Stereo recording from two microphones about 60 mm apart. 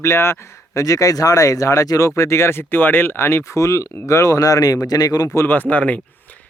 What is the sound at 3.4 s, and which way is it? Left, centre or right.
Speech, left.